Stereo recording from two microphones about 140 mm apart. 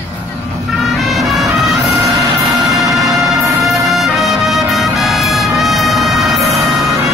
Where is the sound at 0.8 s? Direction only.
Centre (ahead or behind).